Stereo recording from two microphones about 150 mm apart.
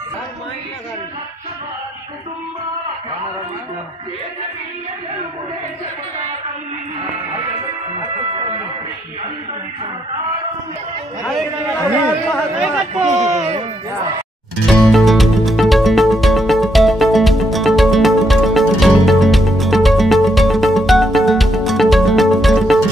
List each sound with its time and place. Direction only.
12.3 s speech: 5° left (ahead or behind)
13.1 s speech: 50° right (ahead or behind)
14.7 s music: centre (ahead or behind)